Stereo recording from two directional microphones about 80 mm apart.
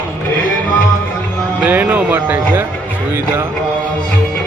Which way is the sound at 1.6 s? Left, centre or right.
Right.